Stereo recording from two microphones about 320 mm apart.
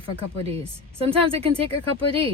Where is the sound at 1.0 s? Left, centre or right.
Centre.